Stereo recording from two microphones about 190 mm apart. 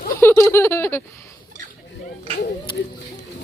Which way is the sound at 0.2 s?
15° left (ahead or behind).